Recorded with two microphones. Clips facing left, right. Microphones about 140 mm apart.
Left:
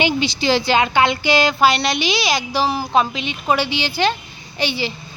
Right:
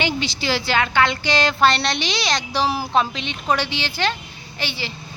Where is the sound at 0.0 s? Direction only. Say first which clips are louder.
Left 5 dB; 15° left (ahead or behind); by 2.9 s 5° right (ahead or behind).